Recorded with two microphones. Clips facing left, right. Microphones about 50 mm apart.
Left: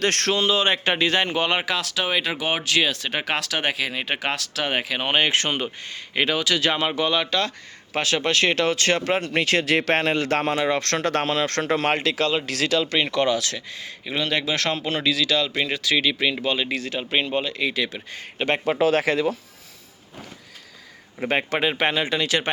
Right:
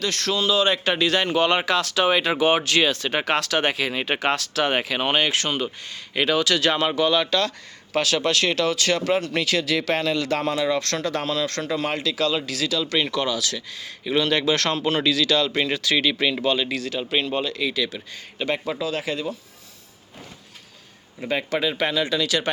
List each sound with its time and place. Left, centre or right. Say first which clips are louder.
0.0 s a man's voice: left 2 dB; left; by 5.1 s centre
5.3 s speech: left 1 dB; left
6.1 s a man's voice: right 1 dB; centre; by 13.9 s left
14.0 s speech: right 4 dB; centre; by 18.4 s left
18.4 s a man's voice: left 3 dB; left
18.8 s speech: left 7 dB; left
21.2 s speech: left 1 dB; left